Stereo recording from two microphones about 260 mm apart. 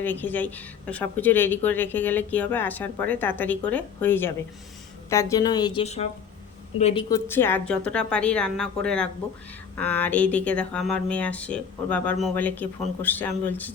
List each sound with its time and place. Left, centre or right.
0.0 s speech: centre; by 7.0 s left
7.1 s speech: centre